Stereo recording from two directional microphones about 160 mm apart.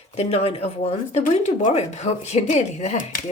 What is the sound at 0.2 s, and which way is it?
Speech, 40° left (ahead or behind).